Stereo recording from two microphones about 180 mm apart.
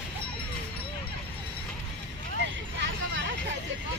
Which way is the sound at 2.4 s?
90° right.